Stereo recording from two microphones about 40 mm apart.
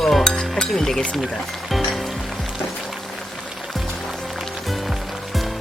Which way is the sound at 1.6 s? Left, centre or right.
Centre.